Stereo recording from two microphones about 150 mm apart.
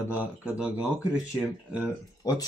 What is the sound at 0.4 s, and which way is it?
Speech, 5° right (ahead or behind).